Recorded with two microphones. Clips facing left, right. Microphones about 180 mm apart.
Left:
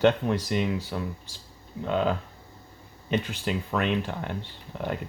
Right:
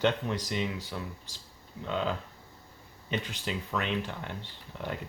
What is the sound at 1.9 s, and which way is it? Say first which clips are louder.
Speech: left 6 dB; 50° left (ahead or behind).